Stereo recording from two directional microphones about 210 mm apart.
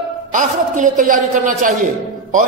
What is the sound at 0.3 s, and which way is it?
A man's voice, 35° right (ahead or behind).